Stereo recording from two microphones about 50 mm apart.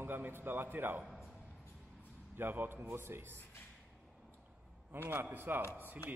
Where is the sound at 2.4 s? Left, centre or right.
Right.